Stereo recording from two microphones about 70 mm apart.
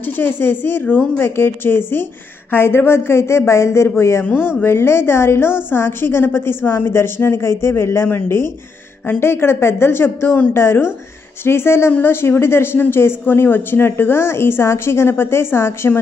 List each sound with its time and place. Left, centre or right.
0.0 s a woman's voice: left